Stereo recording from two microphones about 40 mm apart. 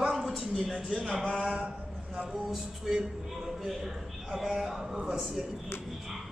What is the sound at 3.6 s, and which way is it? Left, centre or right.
A man's voice, centre.